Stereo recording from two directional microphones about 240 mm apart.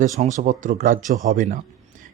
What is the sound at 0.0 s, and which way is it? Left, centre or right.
A man's voice, right.